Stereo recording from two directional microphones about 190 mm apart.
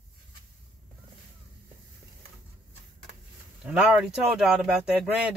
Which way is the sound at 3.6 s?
5° right (ahead or behind).